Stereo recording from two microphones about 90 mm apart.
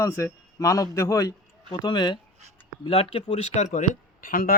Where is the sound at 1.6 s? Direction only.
55° left (ahead or behind).